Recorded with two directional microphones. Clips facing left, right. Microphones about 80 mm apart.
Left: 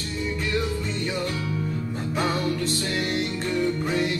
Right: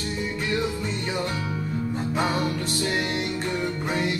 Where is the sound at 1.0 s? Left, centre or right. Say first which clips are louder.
Even; right.